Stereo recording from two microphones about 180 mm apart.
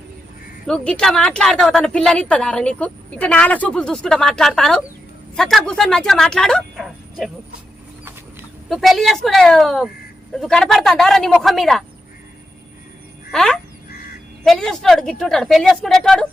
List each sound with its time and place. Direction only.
0.7 s a woman's voice: 5° left (ahead or behind)
8.7 s a woman's voice: centre (ahead or behind)
13.3 s a woman's voice: centre (ahead or behind)